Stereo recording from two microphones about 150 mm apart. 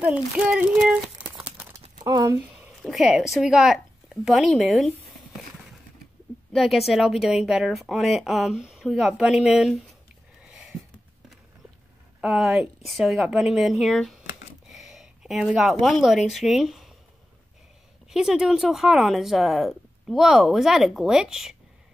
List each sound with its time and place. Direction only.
0.0 s speech: 10° right (ahead or behind)
2.0 s speech: 20° right (ahead or behind)
2.5 s speech: 5° right (ahead or behind)
6.5 s speech: centre (ahead or behind)
10.4 s a sound: 5° right (ahead or behind)
12.2 s speech: 5° right (ahead or behind)
18.1 s speech: 5° right (ahead or behind)